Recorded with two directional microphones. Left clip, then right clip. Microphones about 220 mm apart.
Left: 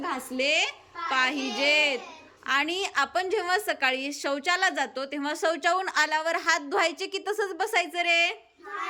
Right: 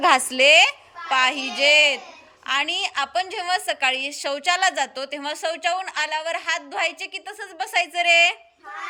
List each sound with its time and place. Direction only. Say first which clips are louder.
0.3 s a woman's voice: right 8 dB; 5° left (ahead or behind)